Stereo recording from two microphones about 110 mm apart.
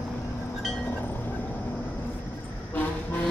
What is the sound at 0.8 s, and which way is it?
Vehicle, 15° left (ahead or behind).